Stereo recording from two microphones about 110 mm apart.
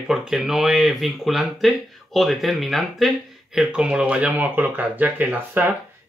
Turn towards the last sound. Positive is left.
turn(degrees=-15)  # may be behind; listen again after turning